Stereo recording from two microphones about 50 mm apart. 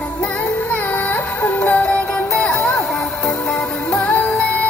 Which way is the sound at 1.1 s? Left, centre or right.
Left.